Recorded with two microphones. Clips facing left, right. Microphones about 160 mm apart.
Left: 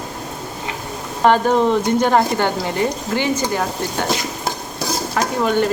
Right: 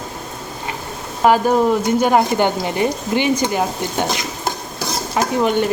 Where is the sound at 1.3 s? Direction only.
10° right (ahead or behind).